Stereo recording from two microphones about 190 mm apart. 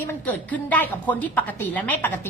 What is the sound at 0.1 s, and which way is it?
A woman's voice, 10° left (ahead or behind).